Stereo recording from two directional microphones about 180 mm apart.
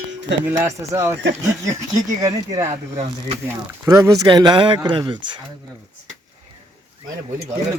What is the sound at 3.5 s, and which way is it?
Speech, 15° right (ahead or behind).